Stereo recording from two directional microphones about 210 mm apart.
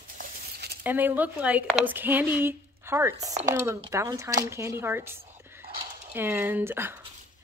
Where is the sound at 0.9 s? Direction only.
10° right (ahead or behind).